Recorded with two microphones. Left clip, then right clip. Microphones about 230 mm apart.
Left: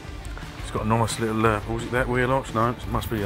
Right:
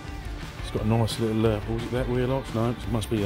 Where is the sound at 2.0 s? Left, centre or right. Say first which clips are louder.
Left 5 dB; centre.